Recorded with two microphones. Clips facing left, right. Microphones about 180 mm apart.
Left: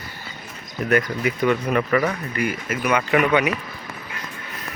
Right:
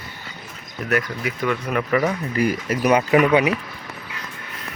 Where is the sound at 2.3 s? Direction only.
35° right (ahead or behind).